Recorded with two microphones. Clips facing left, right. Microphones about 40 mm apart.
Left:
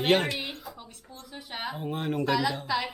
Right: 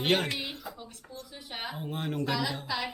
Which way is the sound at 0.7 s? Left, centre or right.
Centre.